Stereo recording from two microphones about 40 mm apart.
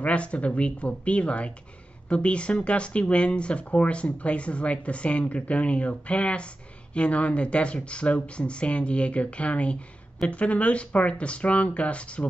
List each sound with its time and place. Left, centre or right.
0.0 s speech: left